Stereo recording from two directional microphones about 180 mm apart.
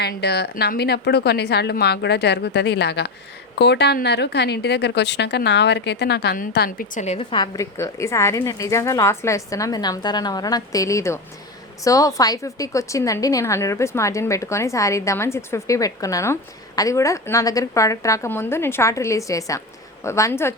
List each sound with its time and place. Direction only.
0.0 s a woman's voice: 65° left (ahead or behind); by 20.6 s 15° left (ahead or behind)